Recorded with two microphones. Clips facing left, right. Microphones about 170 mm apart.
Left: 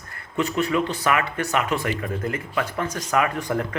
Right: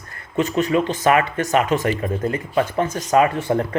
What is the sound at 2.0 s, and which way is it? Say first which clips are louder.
Speech: right 5 dB; 30° right (ahead or behind).